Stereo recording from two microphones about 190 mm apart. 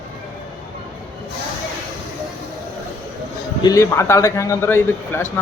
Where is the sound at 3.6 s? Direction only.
15° left (ahead or behind).